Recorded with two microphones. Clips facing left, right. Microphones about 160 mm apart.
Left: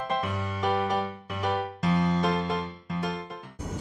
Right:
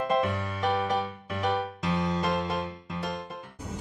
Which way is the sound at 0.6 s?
Centre (ahead or behind).